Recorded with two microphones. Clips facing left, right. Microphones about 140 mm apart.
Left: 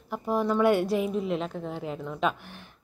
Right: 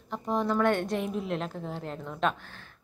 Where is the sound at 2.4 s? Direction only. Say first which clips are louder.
Left 3 dB; 15° left (ahead or behind).